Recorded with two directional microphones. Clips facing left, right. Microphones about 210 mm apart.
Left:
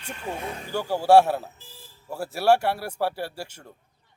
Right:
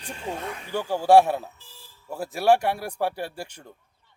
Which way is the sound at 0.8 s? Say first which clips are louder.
Even; 10° left (ahead or behind).